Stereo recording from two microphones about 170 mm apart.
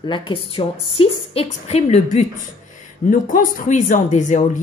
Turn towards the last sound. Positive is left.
turn(degrees=45)  # may be behind; listen again after turning